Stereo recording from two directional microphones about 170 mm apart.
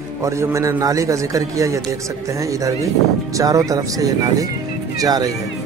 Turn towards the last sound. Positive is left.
turn(degrees=-20)  # may be behind; listen again after turning